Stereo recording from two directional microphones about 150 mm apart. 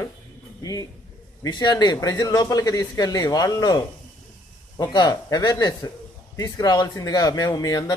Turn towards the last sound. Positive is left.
turn(degrees=25)  # may be behind; listen again after turning